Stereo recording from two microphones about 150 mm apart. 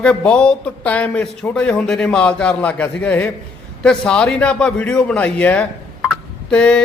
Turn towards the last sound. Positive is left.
turn(degrees=5)  # may be behind; listen again after turning